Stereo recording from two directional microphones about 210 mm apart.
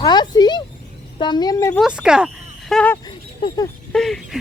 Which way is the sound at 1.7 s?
5° right (ahead or behind).